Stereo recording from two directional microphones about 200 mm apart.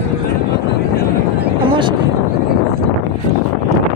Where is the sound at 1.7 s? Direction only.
25° right (ahead or behind).